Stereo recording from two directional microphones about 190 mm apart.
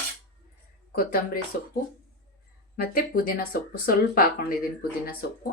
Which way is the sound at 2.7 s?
50° left (ahead or behind).